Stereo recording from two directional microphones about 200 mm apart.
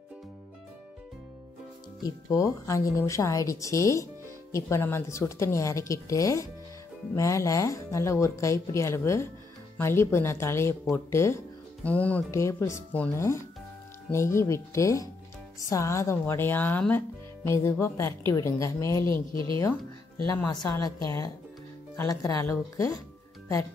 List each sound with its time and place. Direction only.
2.0 s speech: 15° left (ahead or behind)
19.3 s a woman's voice: 25° right (ahead or behind)
20.6 s speech: 15° left (ahead or behind)